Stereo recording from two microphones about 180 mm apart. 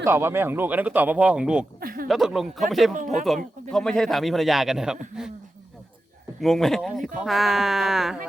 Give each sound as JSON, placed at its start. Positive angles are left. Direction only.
{"t": 0.0, "sound": "speech", "side_deg": -15}
{"t": 1.8, "sound": "a sound", "side_deg": -55}
{"t": 2.0, "sound": "speech", "side_deg": 0}
{"t": 6.4, "sound": "speech", "side_deg": 0}